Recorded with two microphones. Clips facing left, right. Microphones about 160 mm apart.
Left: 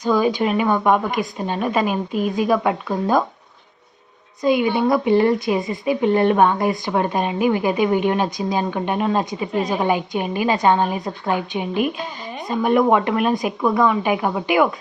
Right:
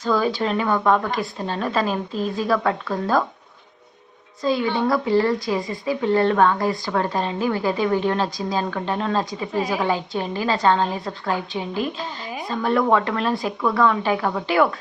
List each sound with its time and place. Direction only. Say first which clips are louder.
0.0 s speech: left 3 dB; 15° left (ahead or behind)
4.4 s speech: left 3 dB; 15° left (ahead or behind)